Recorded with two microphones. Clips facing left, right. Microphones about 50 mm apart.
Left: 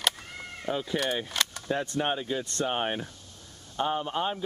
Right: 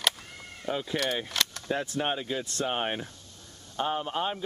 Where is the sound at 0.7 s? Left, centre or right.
Centre.